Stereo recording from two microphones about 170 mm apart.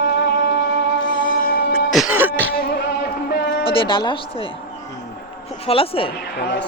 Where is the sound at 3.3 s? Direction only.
70° left (ahead or behind).